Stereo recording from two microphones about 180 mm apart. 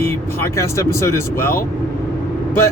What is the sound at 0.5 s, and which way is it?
Speech, 15° left (ahead or behind).